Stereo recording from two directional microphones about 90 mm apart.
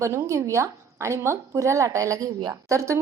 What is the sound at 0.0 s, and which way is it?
A woman's voice, 30° right (ahead or behind).